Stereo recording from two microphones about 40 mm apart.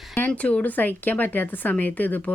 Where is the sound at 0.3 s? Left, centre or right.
Left.